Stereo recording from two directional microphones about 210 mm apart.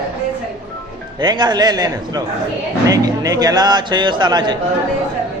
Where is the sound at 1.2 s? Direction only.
20° right (ahead or behind).